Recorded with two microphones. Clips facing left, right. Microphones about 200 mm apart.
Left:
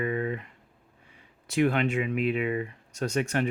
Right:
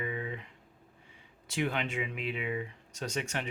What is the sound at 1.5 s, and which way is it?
Speech, 60° left (ahead or behind).